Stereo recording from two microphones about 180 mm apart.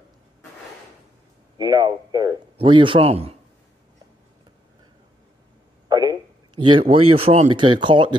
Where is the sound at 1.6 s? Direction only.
20° right (ahead or behind).